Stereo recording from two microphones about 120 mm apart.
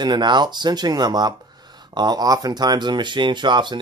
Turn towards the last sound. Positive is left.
turn(degrees=-40)  # may be behind; listen again after turning